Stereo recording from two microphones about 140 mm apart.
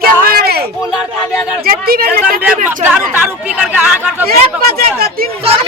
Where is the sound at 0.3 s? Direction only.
90° right.